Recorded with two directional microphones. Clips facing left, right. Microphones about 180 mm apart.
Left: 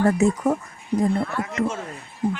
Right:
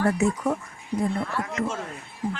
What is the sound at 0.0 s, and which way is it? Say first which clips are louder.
Speech: left 4 dB; 40° left (ahead or behind).